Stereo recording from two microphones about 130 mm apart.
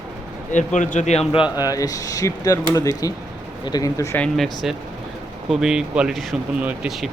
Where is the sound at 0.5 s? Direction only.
75° left (ahead or behind).